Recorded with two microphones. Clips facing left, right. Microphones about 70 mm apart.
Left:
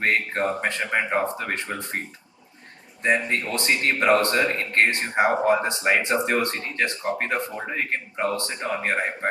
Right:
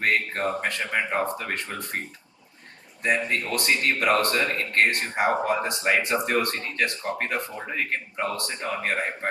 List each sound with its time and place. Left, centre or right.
0.0 s a man's voice: left
3.0 s a man's voice: left